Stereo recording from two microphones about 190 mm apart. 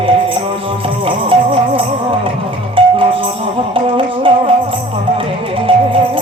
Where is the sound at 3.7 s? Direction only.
25° right (ahead or behind).